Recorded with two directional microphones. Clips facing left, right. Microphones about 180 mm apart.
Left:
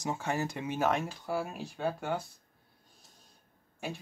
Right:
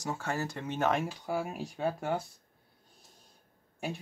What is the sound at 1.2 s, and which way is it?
Speech, 15° right (ahead or behind).